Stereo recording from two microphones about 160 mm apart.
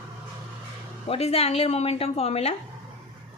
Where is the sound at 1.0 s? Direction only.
40° left (ahead or behind).